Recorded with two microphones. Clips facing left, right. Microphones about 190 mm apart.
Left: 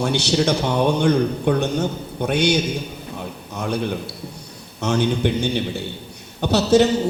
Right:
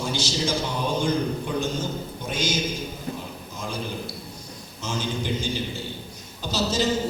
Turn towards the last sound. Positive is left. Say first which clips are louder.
# left 9 dB
turn(degrees=65)  # may be behind; listen again after turning